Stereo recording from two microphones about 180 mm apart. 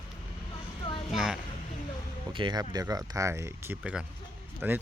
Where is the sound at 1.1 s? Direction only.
Centre (ahead or behind).